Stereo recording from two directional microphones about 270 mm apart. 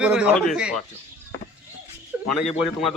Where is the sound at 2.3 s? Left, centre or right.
Centre.